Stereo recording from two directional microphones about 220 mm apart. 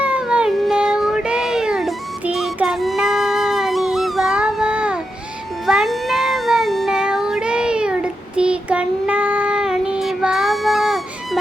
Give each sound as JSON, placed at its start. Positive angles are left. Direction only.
{"t": 0.0, "sound": "cat", "side_deg": -5}
{"t": 5.6, "sound": "meow", "side_deg": 0}